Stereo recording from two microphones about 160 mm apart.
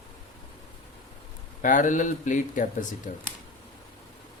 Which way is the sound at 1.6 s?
55° left (ahead or behind).